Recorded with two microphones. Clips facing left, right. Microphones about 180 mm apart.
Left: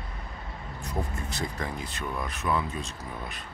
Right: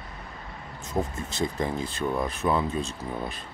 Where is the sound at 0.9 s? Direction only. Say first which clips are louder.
Right 4 dB; 25° right (ahead or behind).